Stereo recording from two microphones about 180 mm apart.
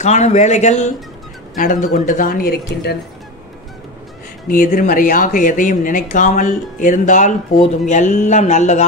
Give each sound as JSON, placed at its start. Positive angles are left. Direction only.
{"t": 0.0, "sound": "speech", "side_deg": 40}
{"t": 4.5, "sound": "speech", "side_deg": 50}